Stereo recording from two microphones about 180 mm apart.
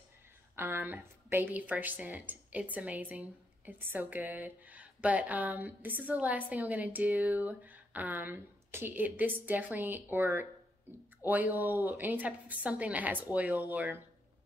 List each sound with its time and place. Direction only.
0.6 s a woman's voice: 15° right (ahead or behind)